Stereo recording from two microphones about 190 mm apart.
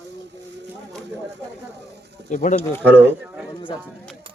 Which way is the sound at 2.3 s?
40° left (ahead or behind).